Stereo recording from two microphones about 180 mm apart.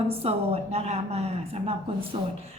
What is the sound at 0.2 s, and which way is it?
A woman's voice, 35° right (ahead or behind).